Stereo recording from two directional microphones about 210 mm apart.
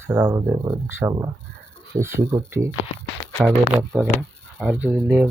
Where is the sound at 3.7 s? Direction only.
5° right (ahead or behind).